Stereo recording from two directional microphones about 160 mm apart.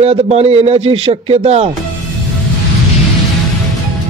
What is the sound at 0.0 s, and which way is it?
A man's voice, 40° right (ahead or behind).